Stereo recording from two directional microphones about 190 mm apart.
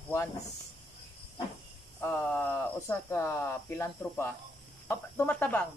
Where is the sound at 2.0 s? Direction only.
10° left (ahead or behind).